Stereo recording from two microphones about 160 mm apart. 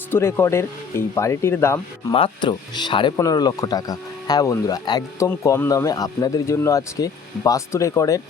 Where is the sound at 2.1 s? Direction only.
30° left (ahead or behind).